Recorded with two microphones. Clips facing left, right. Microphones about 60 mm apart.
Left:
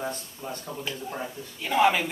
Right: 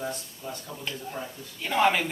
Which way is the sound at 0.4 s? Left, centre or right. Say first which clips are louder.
Left 2 dB; left.